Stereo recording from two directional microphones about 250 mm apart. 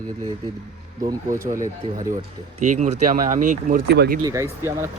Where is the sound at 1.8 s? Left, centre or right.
Centre; by 4.2 s right.